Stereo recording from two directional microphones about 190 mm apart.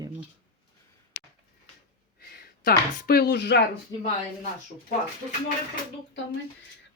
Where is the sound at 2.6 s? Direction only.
55° left (ahead or behind).